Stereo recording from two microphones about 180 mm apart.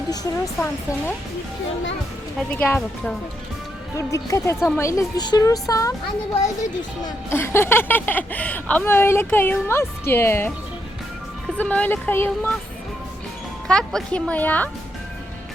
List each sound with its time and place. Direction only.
0.1 s speech: 20° left (ahead or behind)
2.5 s speech: 10° left (ahead or behind)
7.0 s speech: 15° left (ahead or behind)
11.5 s speech: 10° left (ahead or behind)
13.7 s speech: 5° left (ahead or behind)